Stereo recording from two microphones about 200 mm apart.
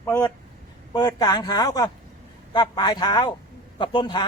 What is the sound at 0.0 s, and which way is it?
A man's voice, 15° left (ahead or behind).